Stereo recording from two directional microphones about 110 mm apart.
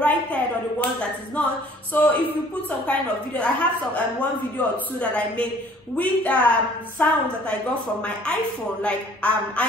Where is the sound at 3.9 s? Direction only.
15° left (ahead or behind).